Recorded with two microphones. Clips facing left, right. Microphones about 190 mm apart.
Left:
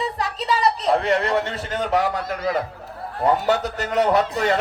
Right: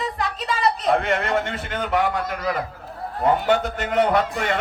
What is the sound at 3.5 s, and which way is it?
A man's voice, 40° left (ahead or behind).